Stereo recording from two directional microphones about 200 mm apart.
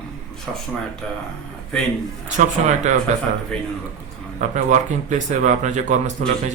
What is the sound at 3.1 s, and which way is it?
Speech, 35° right (ahead or behind).